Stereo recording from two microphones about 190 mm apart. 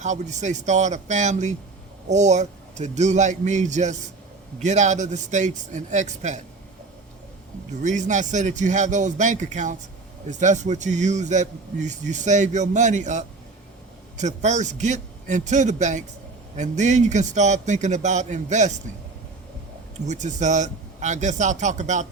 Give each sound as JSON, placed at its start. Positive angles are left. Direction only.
{"t": 0.0, "sound": "a man's voice", "side_deg": -40}
{"t": 7.7, "sound": "a man's voice", "side_deg": -40}
{"t": 20.1, "sound": "a man's voice", "side_deg": -40}